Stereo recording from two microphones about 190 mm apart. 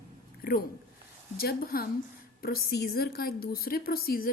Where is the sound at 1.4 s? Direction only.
55° left (ahead or behind).